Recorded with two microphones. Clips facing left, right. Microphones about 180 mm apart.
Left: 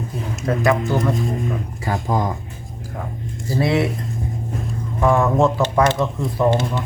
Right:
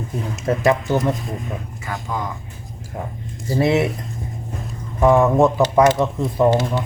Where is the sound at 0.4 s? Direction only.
20° right (ahead or behind).